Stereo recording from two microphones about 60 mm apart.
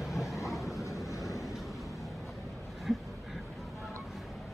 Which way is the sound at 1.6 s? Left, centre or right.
Centre.